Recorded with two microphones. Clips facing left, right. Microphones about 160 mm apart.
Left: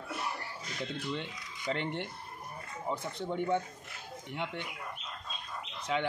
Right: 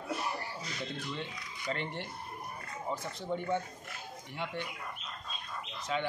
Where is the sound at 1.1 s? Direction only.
20° left (ahead or behind).